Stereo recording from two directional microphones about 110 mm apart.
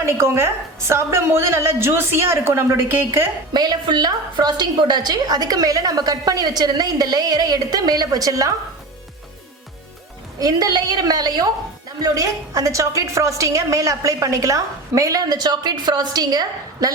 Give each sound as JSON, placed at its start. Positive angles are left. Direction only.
{"t": 0.0, "sound": "a woman's voice", "side_deg": -25}
{"t": 3.5, "sound": "a woman's voice", "side_deg": -40}
{"t": 10.4, "sound": "a woman's voice", "side_deg": -40}